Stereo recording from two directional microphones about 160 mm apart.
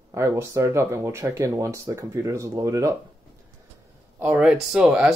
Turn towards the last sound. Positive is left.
turn(degrees=-5)  # may be behind; listen again after turning